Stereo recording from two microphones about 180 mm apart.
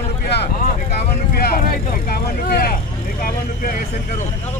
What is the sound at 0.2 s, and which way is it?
Vehicle, 65° left (ahead or behind).